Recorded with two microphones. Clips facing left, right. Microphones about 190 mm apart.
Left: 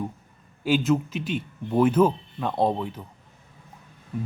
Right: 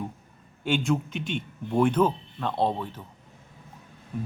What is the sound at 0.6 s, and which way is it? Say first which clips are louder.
Speech: left 4 dB; 5° left (ahead or behind).